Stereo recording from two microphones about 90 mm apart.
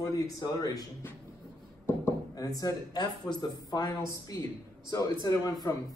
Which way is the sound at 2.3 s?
45° left (ahead or behind).